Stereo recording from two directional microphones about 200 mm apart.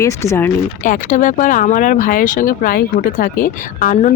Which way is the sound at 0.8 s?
40° left (ahead or behind).